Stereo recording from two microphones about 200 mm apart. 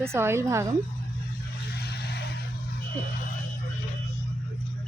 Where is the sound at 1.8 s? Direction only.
55° left (ahead or behind).